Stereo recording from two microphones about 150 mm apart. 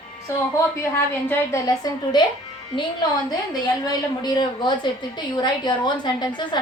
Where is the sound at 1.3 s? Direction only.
25° left (ahead or behind).